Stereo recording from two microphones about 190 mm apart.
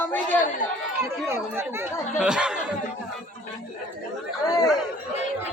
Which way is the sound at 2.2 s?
5° right (ahead or behind).